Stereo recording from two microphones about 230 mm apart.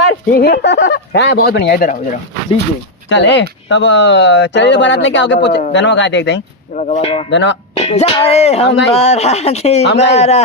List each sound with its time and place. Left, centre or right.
0.3 s speech: left
3.1 s speech: left
6.7 s speech: left
7.3 s speech: left
7.8 s speech: left
9.8 s speech: left
10.2 s speech: left